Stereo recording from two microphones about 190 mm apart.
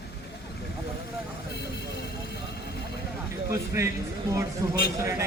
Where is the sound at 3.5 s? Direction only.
15° right (ahead or behind).